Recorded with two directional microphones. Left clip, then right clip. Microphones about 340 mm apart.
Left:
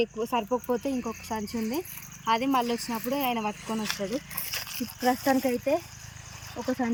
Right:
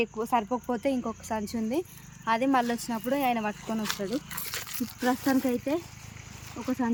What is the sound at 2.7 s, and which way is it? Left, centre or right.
Speech, centre.